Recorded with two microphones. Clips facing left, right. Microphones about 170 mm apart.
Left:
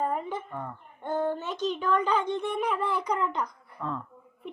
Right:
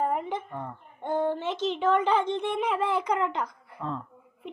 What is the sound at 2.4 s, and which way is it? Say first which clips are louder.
Speech: right 1 dB; 75° right (ahead or behind).